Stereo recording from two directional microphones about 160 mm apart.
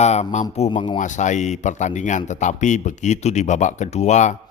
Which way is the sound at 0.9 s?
50° left (ahead or behind).